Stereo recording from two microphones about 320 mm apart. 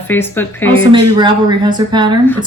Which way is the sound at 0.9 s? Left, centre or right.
Centre.